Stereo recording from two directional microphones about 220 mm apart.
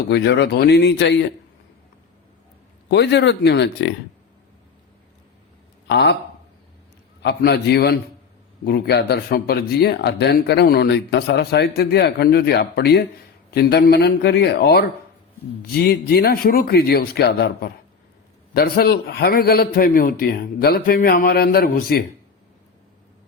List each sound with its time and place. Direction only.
0.1 s speech: 50° left (ahead or behind)
2.9 s speech: 50° left (ahead or behind)
5.9 s speech: 50° left (ahead or behind)
7.2 s speech: 50° left (ahead or behind)